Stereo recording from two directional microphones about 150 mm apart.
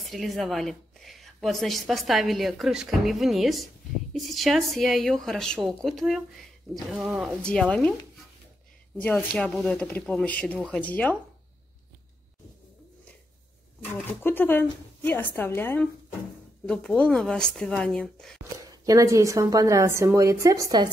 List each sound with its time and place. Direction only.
0.0 s a woman's voice: centre (ahead or behind)
8.9 s a woman's voice: 10° left (ahead or behind)
9.3 s speech: centre (ahead or behind)
14.2 s a woman's voice: 15° left (ahead or behind)
18.7 s a woman's voice: 20° right (ahead or behind)